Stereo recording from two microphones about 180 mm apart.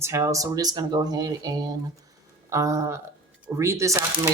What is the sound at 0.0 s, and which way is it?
Speech, 15° right (ahead or behind).